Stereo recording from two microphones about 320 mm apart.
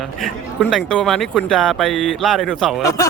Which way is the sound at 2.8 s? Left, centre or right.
Centre.